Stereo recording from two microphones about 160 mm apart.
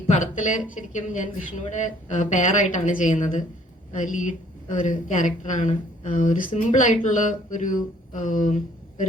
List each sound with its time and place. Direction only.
0.1 s speech: 50° left (ahead or behind)